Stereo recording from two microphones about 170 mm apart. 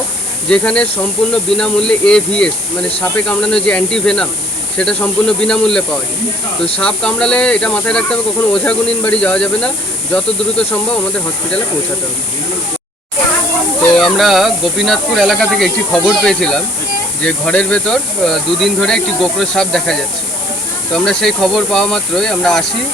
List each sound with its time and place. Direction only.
0.4 s speech: 5° left (ahead or behind)
13.9 s speech: centre (ahead or behind)